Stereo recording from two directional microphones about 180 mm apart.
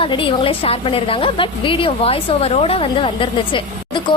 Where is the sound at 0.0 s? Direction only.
30° left (ahead or behind).